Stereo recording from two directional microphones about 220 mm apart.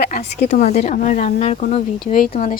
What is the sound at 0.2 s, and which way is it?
A woman's voice, 30° left (ahead or behind).